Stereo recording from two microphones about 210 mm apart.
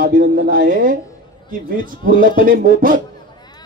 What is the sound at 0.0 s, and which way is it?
Speech, 40° right (ahead or behind).